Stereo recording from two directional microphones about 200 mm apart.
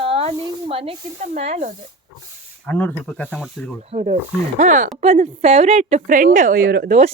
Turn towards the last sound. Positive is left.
turn(degrees=-50)  # may be behind; listen again after turning